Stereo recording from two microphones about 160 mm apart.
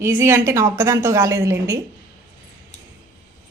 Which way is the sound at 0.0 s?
15° right (ahead or behind).